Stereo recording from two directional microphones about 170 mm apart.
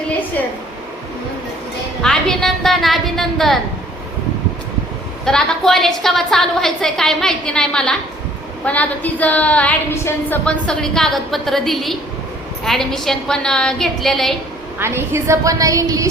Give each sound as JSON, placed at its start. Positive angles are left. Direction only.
{"t": 2.0, "sound": "a sound", "side_deg": 5}
{"t": 5.2, "sound": "a woman's voice", "side_deg": 5}
{"t": 14.8, "sound": "a woman's voice", "side_deg": -15}